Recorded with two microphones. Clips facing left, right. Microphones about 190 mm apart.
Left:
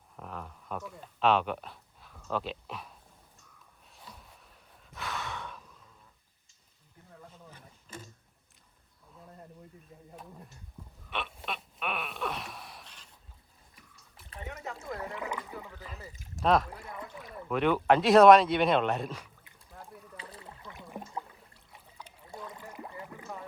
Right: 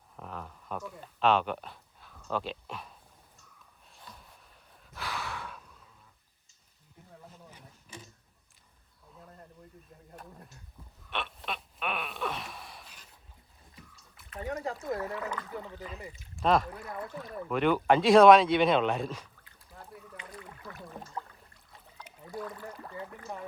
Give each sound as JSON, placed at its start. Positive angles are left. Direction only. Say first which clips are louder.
{"t": 0.2, "sound": "a sound", "louder": "even", "side_deg": 0}
{"t": 3.9, "sound": "a sound", "louder": "even", "side_deg": 5}
{"t": 4.9, "sound": "sigh", "louder": "even", "side_deg": 0}
{"t": 7.5, "sound": "a sound", "louder": "left 2 dB", "side_deg": -10}
{"t": 9.1, "sound": "a sound", "louder": "left 1 dB", "side_deg": 5}
{"t": 11.1, "sound": "gasp", "louder": "even", "side_deg": 0}
{"t": 14.3, "sound": "speech", "louder": "right 6 dB", "side_deg": -35}
{"t": 14.9, "sound": "speech", "louder": "right 2 dB", "side_deg": 20}
{"t": 16.4, "sound": "speech", "louder": "even", "side_deg": 0}
{"t": 16.7, "sound": "speech", "louder": "right 4 dB", "side_deg": 25}
{"t": 17.5, "sound": "speech", "louder": "even", "side_deg": 0}
{"t": 20.1, "sound": "rowboat", "louder": "right 1 dB", "side_deg": 30}
{"t": 22.0, "sound": "speech", "louder": "right 5 dB", "side_deg": 25}